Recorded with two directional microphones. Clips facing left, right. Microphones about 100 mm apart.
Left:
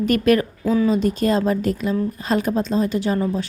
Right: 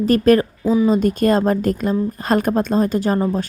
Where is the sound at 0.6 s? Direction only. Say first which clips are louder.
Right 2 dB; 15° right (ahead or behind).